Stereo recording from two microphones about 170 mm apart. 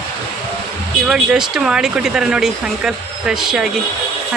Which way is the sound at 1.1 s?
5° right (ahead or behind).